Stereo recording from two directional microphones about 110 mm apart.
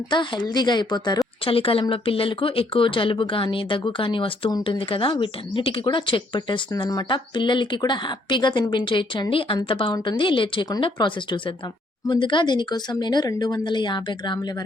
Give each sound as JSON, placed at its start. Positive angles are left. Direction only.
{"t": 0.1, "sound": "a woman's voice", "side_deg": 40}
{"t": 1.5, "sound": "a woman's voice", "side_deg": 55}